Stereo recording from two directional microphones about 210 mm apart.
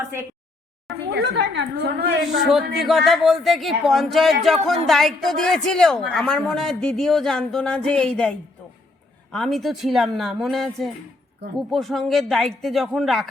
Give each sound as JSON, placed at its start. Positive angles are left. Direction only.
{"t": 1.1, "sound": "a woman's voice", "side_deg": -55}
{"t": 2.4, "sound": "a man's voice", "side_deg": 0}